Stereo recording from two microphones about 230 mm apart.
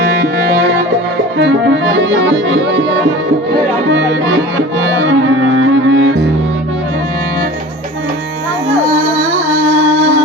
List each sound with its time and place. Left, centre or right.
2.0 s accordion: right
4.9 s music: right